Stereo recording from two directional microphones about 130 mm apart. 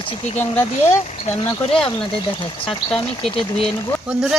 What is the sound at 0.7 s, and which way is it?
Speech, 65° left (ahead or behind).